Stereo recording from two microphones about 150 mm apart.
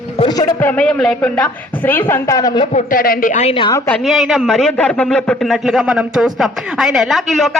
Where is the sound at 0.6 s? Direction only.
10° left (ahead or behind); by 2.7 s 25° left (ahead or behind).